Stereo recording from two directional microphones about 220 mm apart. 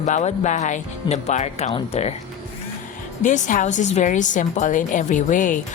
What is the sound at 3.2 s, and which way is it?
Speech, 35° left (ahead or behind).